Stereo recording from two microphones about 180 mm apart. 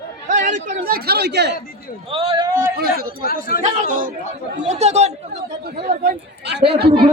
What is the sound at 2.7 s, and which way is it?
A man's voice, 55° right (ahead or behind).